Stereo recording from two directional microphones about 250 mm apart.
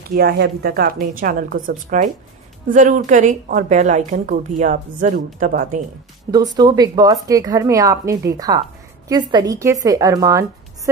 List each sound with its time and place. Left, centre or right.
0.1 s a woman's voice: right
6.3 s speech: centre